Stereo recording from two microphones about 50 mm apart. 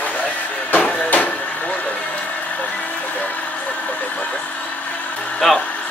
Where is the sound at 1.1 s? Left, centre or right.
Left.